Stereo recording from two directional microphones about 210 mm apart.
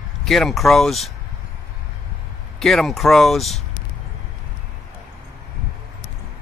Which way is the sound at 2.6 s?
Centre (ahead or behind).